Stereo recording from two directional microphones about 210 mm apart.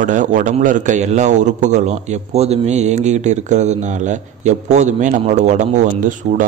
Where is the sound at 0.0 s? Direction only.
35° right (ahead or behind).